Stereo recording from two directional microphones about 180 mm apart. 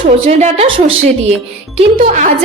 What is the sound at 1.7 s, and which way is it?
Speech, 45° right (ahead or behind).